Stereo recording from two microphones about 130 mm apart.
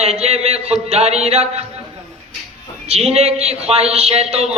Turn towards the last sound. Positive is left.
turn(degrees=-55)  # may be behind; listen again after turning